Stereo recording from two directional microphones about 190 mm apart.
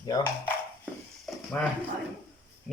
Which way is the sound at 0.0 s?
20° left (ahead or behind).